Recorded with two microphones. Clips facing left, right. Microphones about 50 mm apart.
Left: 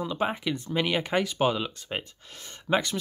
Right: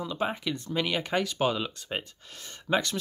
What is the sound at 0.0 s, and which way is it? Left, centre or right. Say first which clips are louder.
Speech: left 2 dB; left.